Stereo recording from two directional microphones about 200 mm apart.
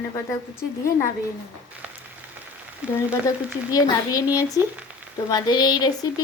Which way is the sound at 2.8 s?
5° right (ahead or behind).